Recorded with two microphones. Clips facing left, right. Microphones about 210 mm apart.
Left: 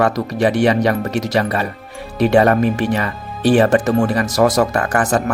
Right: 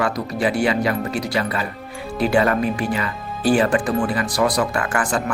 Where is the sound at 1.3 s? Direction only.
40° left (ahead or behind).